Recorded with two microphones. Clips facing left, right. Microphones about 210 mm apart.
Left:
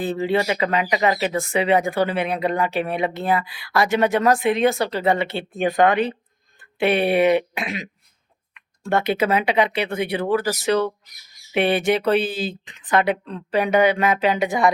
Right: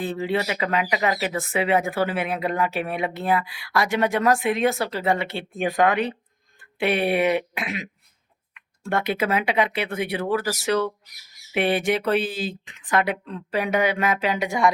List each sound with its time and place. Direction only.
0.2 s speech: 30° left (ahead or behind)
0.6 s speech: 5° right (ahead or behind)
7.2 s speech: 30° left (ahead or behind)
9.0 s speech: centre (ahead or behind)
10.5 s speech: 15° left (ahead or behind)
11.5 s speech: centre (ahead or behind)